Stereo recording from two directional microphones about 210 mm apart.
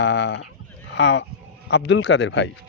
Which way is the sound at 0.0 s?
55° left (ahead or behind).